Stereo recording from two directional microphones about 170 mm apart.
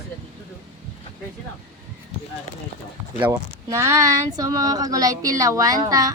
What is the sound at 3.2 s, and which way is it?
Speech, 15° right (ahead or behind).